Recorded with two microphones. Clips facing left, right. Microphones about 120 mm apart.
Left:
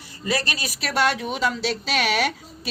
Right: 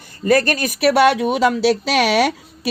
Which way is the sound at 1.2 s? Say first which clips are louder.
Right 9 dB; 80° right.